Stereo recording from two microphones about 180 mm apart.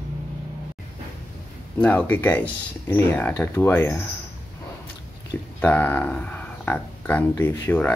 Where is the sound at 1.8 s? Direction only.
10° left (ahead or behind).